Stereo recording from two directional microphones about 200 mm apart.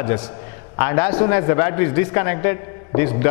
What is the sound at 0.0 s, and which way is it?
A man's voice, 10° left (ahead or behind).